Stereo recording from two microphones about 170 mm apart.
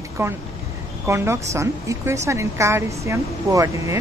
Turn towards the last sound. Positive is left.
turn(degrees=-20)  # may be behind; listen again after turning